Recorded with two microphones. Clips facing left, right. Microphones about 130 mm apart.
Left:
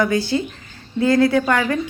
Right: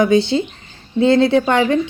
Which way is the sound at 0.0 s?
25° right (ahead or behind).